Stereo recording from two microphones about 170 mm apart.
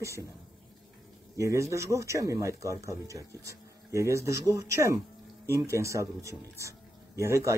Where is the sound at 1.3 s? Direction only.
20° right (ahead or behind).